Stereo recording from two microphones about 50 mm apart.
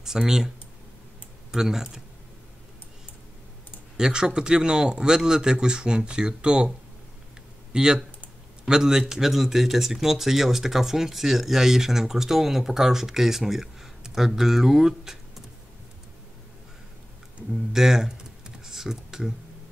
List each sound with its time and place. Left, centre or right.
0.0 s speech: centre
1.5 s speech: centre
3.9 s speech: centre
7.7 s speech: centre
17.7 s computer keyboard: centre